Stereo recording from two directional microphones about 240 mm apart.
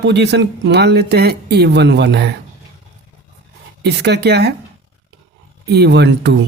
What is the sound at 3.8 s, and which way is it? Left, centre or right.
Speech, right.